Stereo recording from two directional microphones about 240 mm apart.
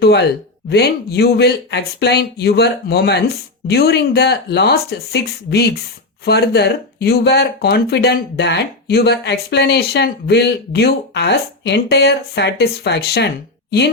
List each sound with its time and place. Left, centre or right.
0.0 s speech: left